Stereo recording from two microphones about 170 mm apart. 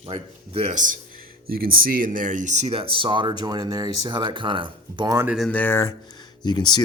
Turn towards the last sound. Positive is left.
turn(degrees=25)  # may be behind; listen again after turning